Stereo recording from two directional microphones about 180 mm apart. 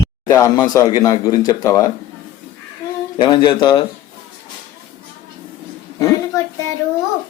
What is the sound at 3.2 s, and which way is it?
Speech, 25° left (ahead or behind).